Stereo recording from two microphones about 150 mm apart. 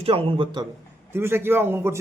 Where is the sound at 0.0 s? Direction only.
40° right (ahead or behind).